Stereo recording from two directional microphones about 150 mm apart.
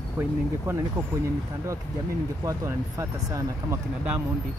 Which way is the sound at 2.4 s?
20° right (ahead or behind).